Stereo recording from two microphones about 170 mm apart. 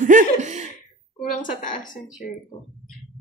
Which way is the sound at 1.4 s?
50° left (ahead or behind).